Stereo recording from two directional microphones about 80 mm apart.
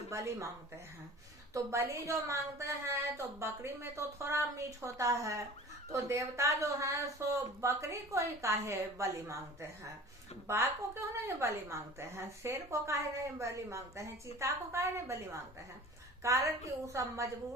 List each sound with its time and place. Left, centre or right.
0.1 s a woman's voice: right
1.5 s a woman's voice: right